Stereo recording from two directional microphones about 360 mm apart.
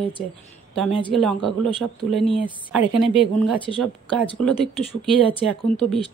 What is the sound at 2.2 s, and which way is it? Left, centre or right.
Speech, centre.